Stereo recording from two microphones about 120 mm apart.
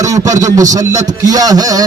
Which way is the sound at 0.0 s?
30° right (ahead or behind).